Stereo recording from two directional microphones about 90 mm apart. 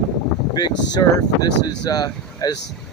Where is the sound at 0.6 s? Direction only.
50° left (ahead or behind).